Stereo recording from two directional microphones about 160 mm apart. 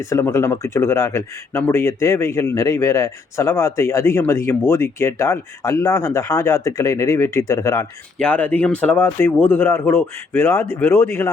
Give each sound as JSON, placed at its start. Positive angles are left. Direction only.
{"t": 0.0, "sound": "speech", "side_deg": 20}
{"t": 8.2, "sound": "speech", "side_deg": 10}